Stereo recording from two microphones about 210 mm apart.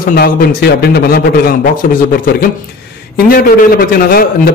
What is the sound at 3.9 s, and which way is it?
Speech, 45° left (ahead or behind).